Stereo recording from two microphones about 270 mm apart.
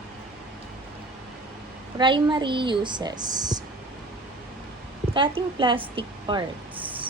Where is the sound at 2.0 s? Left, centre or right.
Centre.